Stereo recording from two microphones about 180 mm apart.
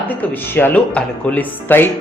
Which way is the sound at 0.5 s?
10° left (ahead or behind).